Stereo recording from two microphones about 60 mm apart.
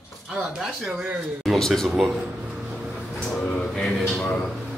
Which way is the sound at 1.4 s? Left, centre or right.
Centre.